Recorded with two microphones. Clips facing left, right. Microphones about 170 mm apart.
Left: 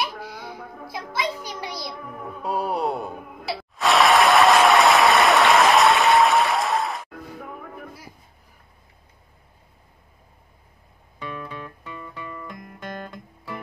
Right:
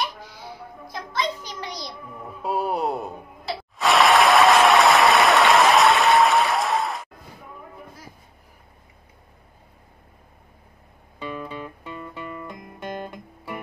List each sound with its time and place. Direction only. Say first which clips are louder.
0.8 s a child's voice: right 1 dB; 10° left (ahead or behind)
2.4 s music: even; centre (ahead or behind)
3.7 s applause: even; centre (ahead or behind)
7.3 s music: left 3 dB; 70° left (ahead or behind)
11.1 s guitar: right 2 dB; 20° right (ahead or behind)